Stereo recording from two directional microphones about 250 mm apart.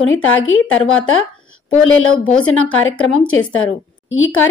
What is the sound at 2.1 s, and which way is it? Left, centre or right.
Speech, centre.